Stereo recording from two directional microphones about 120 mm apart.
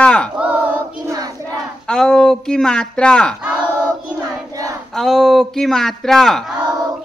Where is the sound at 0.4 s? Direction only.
10° right (ahead or behind).